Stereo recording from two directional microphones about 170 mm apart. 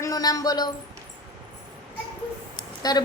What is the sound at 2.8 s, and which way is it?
Speech, 20° left (ahead or behind).